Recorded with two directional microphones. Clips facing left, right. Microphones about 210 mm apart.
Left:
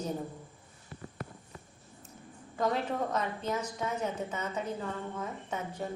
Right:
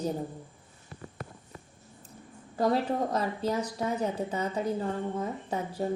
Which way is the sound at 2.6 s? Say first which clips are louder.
Right 4 dB; 35° right (ahead or behind).